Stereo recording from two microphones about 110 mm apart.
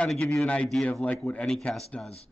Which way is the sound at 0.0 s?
5° left (ahead or behind).